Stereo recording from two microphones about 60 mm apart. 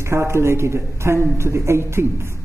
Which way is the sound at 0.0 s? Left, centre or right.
Right.